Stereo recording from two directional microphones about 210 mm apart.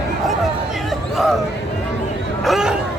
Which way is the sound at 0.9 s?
Centre (ahead or behind).